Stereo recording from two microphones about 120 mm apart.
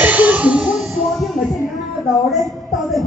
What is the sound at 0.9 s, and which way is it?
Music, centre (ahead or behind).